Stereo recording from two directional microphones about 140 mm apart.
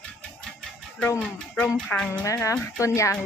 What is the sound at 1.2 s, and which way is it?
Speech, 5° left (ahead or behind).